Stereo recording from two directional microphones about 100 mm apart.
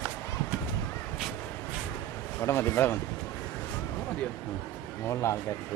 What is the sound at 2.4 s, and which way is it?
Speech, 25° left (ahead or behind).